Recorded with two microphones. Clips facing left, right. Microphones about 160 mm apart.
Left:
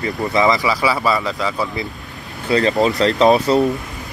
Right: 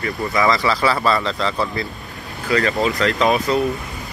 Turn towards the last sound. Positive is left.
turn(degrees=35)  # may be behind; listen again after turning